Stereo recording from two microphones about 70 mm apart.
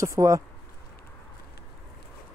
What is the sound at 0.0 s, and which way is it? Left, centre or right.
Speech, right.